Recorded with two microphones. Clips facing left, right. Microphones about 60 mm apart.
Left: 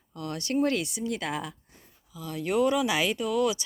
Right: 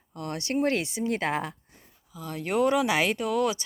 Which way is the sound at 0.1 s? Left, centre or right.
Right.